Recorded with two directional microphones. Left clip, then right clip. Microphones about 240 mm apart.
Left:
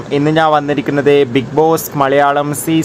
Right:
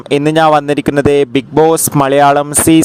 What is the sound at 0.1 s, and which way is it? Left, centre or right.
Speech, right.